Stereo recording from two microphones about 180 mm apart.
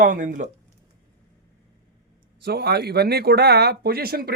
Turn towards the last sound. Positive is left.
turn(degrees=-55)  # may be behind; listen again after turning